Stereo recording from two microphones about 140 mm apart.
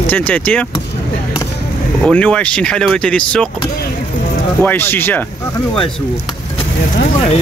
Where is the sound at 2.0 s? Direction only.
5° left (ahead or behind).